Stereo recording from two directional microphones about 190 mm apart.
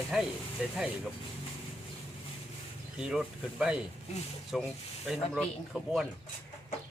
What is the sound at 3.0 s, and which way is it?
Speech, 5° right (ahead or behind).